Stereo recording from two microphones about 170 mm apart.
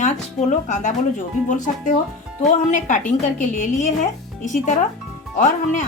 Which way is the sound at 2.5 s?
45° left (ahead or behind).